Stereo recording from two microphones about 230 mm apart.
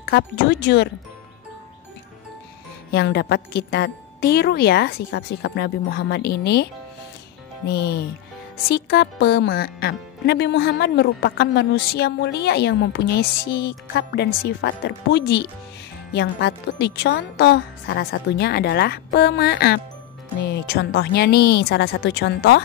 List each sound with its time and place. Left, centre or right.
0.0 s speech: left
2.9 s speech: left